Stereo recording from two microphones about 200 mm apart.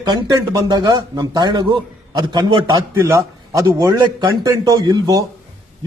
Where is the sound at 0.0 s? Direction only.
20° right (ahead or behind).